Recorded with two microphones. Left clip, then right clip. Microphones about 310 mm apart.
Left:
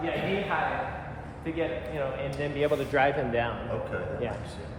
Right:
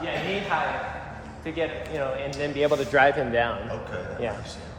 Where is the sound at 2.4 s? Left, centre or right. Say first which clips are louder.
Right 4 dB; right.